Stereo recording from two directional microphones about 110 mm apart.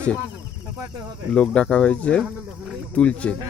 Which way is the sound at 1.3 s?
10° left (ahead or behind).